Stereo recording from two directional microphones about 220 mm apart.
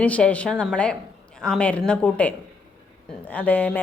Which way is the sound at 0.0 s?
5° left (ahead or behind).